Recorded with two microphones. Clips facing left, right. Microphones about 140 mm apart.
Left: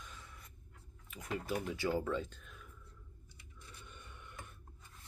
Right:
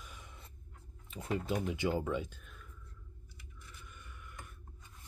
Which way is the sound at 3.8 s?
25° left (ahead or behind).